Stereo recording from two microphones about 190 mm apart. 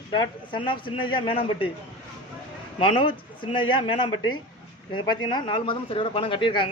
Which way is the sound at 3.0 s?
25° left (ahead or behind).